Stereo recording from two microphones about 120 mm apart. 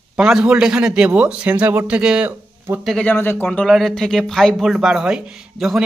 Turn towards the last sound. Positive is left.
turn(degrees=-5)  # may be behind; listen again after turning